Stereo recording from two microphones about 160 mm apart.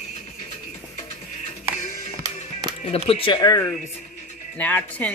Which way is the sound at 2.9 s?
35° left (ahead or behind).